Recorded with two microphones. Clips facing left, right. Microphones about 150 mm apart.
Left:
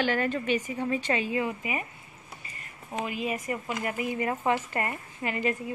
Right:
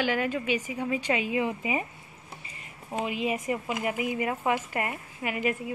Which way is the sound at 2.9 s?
20° right (ahead or behind).